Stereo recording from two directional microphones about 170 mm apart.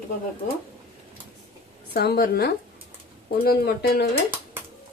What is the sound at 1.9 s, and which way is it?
Speech, 70° left (ahead or behind).